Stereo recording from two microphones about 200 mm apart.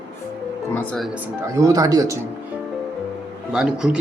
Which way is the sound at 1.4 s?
15° right (ahead or behind).